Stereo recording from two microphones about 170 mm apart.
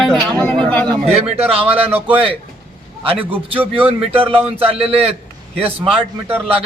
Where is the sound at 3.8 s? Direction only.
30° right (ahead or behind).